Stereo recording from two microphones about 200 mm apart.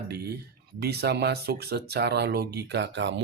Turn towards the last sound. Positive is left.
turn(degrees=-60)  # may be behind; listen again after turning